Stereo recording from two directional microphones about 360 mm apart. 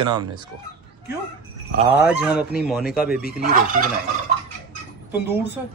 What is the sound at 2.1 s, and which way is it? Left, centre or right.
Speech, centre.